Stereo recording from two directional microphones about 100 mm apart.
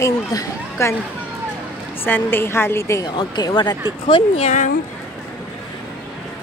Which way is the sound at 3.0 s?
45° left (ahead or behind).